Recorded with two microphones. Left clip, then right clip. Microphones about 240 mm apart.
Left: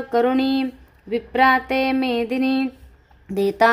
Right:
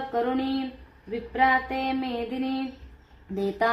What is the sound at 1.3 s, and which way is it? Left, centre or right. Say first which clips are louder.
Mantra: left 6 dB; left.